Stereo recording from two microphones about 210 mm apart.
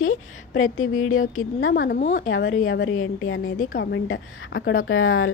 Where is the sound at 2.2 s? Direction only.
65° left (ahead or behind).